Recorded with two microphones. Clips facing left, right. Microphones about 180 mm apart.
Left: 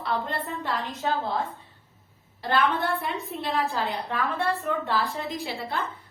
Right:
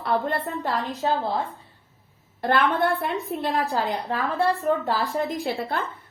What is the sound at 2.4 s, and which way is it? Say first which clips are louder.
A woman's voice: right 3 dB; 55° right (ahead or behind).